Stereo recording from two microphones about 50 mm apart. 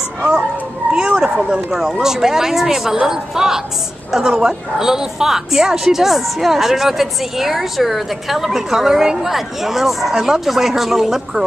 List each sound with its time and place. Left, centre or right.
0.2 s speech: right
0.9 s a sound: centre
1.8 s a woman's voice: centre